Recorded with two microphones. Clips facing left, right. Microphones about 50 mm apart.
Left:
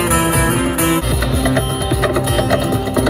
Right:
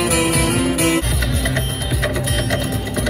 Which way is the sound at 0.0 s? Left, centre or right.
Left.